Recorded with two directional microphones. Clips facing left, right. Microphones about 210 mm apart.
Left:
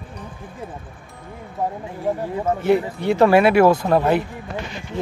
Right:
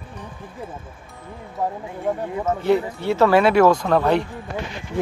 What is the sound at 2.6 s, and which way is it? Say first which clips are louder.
Speech: left 1 dB; 10° left (ahead or behind).